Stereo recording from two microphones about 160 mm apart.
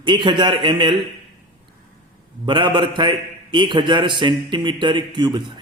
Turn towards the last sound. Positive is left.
turn(degrees=-30)  # may be behind; listen again after turning